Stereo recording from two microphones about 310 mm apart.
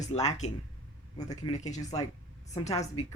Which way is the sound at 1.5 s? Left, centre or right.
Left.